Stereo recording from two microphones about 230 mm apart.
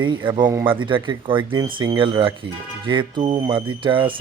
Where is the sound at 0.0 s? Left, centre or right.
Right.